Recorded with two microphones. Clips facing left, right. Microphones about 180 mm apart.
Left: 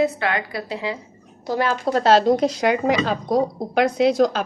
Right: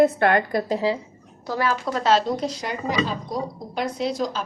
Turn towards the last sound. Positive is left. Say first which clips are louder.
# left 8 dB
turn(degrees=70)  # may be behind; listen again after turning